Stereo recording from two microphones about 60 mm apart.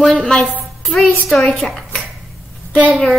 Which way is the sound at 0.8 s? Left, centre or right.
Centre.